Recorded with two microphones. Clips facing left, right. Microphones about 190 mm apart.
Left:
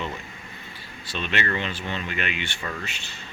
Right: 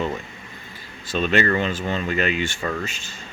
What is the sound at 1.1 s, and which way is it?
Speech, 40° right (ahead or behind).